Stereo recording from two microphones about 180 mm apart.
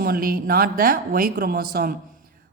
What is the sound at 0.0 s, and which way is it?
A woman's voice, 55° right (ahead or behind).